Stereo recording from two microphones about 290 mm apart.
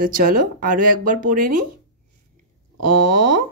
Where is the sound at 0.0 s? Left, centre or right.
Right.